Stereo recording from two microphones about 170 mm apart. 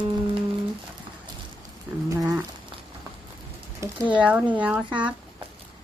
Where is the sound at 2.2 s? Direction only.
20° right (ahead or behind).